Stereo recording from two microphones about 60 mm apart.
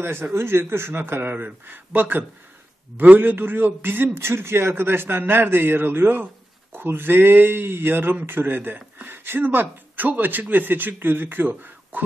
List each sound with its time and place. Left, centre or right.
0.0 s a man's voice: right
1.3 s a man's voice: right